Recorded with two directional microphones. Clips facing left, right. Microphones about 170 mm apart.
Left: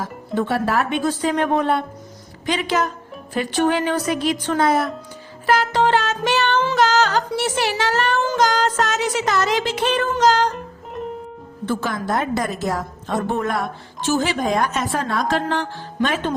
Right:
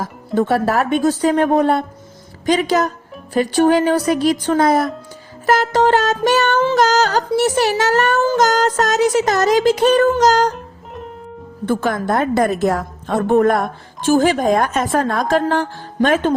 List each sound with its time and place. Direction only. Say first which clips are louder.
0.0 s a woman's voice: right 5 dB; 45° right (ahead or behind)
5.5 s music: right 3 dB; 45° right (ahead or behind)
6.7 s speech: right 3 dB; 40° right (ahead or behind)
10.5 s music: left 1 dB; centre (ahead or behind)
11.6 s a woman's voice: right 5 dB; 50° right (ahead or behind)